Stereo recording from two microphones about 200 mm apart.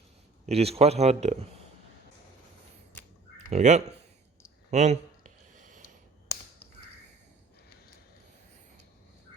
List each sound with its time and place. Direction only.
0.4 s speech: 30° right (ahead or behind)
3.5 s speech: 35° right (ahead or behind)
4.7 s a sound: 35° right (ahead or behind)